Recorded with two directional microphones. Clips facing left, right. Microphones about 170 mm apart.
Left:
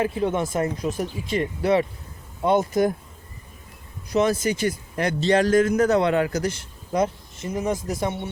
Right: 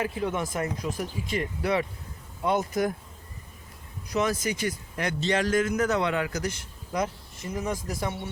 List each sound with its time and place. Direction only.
0.0 s a man's voice: 30° left (ahead or behind)
4.1 s a man's voice: 25° left (ahead or behind)